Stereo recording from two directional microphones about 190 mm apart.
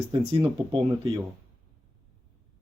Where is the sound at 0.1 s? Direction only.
25° right (ahead or behind).